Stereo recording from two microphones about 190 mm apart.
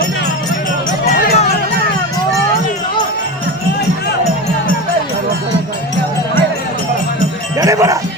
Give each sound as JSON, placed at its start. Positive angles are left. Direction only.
{"t": 1.0, "sound": "music", "side_deg": 35}
{"t": 7.6, "sound": "music", "side_deg": -15}